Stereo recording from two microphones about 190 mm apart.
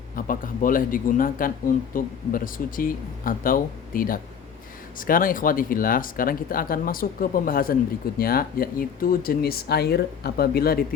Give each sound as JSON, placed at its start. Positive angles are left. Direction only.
{"t": 0.2, "sound": "speech", "side_deg": 45}